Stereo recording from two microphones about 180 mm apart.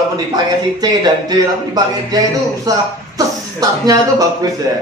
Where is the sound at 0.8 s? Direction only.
20° right (ahead or behind).